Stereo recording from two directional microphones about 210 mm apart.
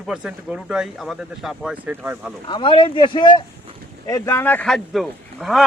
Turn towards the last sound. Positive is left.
turn(degrees=0)  # may be behind; listen again after turning